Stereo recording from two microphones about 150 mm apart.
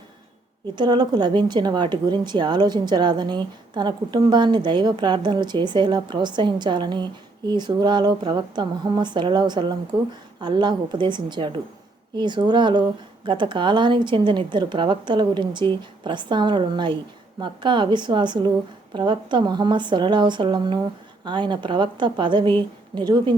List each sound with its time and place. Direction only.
0.8 s a woman's voice: 30° right (ahead or behind)